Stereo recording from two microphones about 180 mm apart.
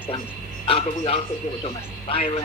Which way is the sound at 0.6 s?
30° left (ahead or behind).